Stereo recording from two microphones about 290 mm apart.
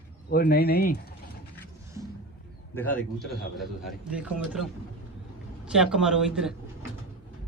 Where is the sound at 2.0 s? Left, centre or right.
Centre.